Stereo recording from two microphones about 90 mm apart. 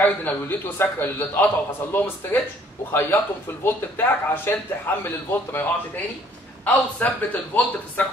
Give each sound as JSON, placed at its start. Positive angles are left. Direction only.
{"t": 0.0, "sound": "a man's voice", "side_deg": 20}